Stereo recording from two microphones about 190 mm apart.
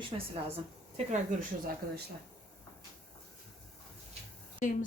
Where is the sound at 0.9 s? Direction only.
40° right (ahead or behind).